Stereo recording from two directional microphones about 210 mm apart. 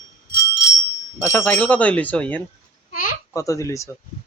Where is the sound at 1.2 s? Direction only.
10° left (ahead or behind).